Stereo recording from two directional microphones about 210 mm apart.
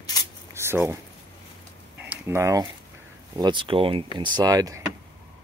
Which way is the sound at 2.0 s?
10° right (ahead or behind).